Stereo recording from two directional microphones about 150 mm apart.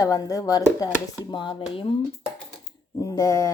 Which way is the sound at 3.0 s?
20° left (ahead or behind).